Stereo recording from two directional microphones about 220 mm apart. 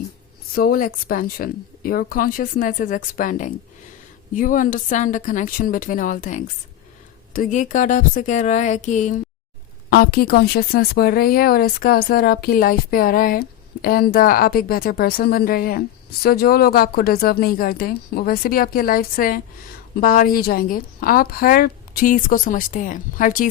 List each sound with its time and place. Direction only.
0.5 s a woman's voice: 40° left (ahead or behind)